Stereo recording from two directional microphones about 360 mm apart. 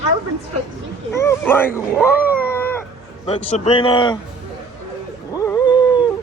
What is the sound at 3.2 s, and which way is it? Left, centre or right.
Speech, centre.